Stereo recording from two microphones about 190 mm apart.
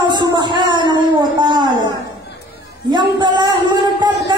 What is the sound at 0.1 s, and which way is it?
Music, 25° right (ahead or behind).